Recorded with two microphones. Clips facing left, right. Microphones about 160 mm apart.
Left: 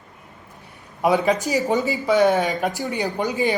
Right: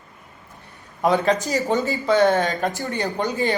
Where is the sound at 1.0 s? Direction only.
10° left (ahead or behind).